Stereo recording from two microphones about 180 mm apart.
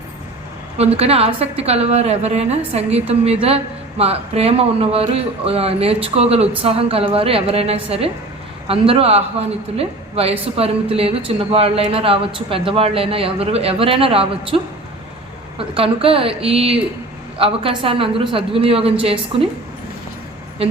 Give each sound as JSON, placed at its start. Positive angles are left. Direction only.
{"t": 0.8, "sound": "a woman's voice", "side_deg": -35}
{"t": 15.5, "sound": "a woman's voice", "side_deg": -30}
{"t": 20.6, "sound": "a woman's voice", "side_deg": -30}